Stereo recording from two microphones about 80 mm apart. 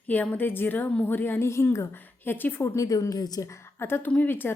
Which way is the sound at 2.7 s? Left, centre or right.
Left.